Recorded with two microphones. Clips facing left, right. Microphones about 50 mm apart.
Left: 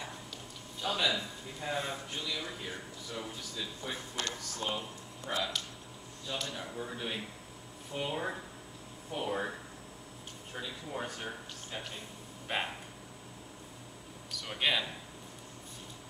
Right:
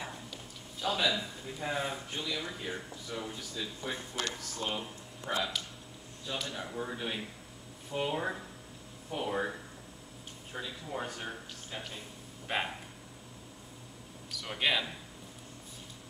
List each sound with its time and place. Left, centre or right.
0.7 s speech: centre
3.9 s speech: right
4.6 s speech: centre
14.3 s speech: centre